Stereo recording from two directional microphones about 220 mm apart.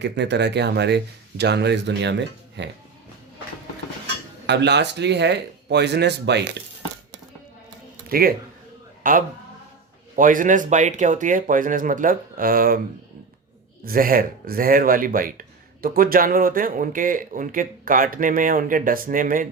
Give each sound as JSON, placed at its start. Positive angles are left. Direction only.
{"t": 0.0, "sound": "speech", "side_deg": -50}
{"t": 4.4, "sound": "speech", "side_deg": -50}
{"t": 8.1, "sound": "speech", "side_deg": -40}
{"t": 13.8, "sound": "speech", "side_deg": -40}